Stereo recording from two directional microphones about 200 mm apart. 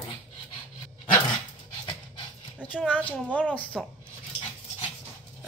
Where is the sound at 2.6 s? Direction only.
5° left (ahead or behind).